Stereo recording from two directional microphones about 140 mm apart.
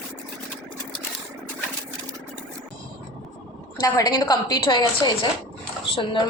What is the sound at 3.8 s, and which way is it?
A woman's voice, 25° left (ahead or behind).